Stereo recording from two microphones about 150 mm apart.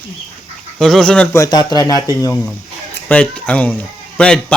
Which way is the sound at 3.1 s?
10° left (ahead or behind).